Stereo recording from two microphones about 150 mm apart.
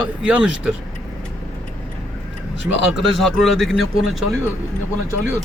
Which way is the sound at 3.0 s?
Centre (ahead or behind).